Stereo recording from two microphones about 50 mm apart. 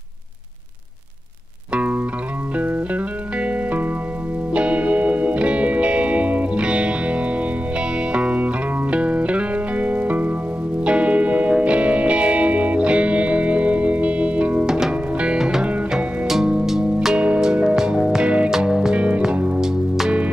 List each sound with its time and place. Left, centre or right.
1.7 s music: right
14.7 s music: centre
16.6 s music: centre; by 19.6 s right